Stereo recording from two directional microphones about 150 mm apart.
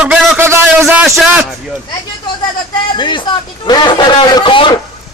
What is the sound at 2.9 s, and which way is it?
A man's voice, 30° left (ahead or behind).